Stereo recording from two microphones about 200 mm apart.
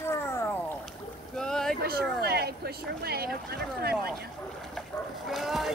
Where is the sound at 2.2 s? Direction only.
50° right (ahead or behind).